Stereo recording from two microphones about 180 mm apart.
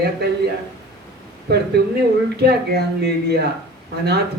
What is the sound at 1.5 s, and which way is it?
A man's voice, 65° right (ahead or behind).